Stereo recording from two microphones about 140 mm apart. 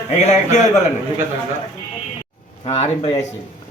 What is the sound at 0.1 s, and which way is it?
Speech, 50° left (ahead or behind).